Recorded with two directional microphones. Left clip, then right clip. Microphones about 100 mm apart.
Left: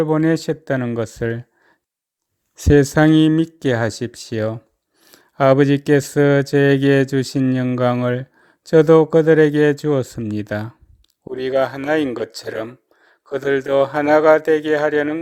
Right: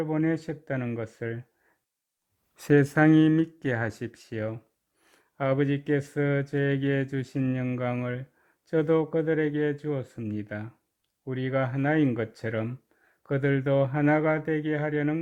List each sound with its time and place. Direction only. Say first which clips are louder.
0.0 s speech: left 11 dB; 50° left (ahead or behind)
2.6 s speech: left 8 dB; 15° left (ahead or behind); by 4.5 s 40° left (ahead or behind)
5.1 s speech: left 14 dB; 60° left (ahead or behind)
10.2 s speech: left 11 dB; 60° left (ahead or behind)